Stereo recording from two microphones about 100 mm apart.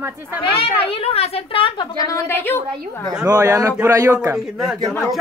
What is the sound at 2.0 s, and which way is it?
Speech, 30° left (ahead or behind).